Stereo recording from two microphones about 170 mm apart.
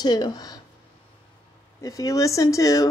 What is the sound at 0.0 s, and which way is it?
Speech, 25° left (ahead or behind).